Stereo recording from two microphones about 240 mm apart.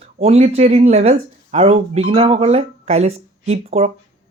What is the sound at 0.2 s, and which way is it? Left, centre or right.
Speech, right.